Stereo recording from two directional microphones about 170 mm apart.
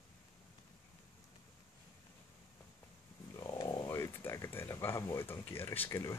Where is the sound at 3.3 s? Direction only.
20° left (ahead or behind).